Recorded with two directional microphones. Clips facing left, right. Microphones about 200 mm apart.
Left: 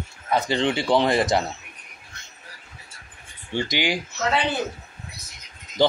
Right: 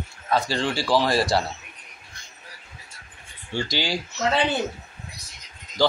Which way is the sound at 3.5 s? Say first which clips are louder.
Left 2 dB; 20° left (ahead or behind).